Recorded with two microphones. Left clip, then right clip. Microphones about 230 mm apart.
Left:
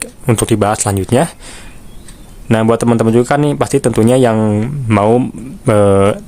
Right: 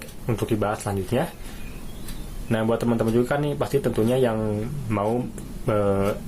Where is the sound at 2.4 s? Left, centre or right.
Left.